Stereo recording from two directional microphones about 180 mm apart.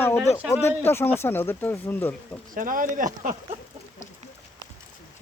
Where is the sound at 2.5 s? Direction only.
50° right (ahead or behind).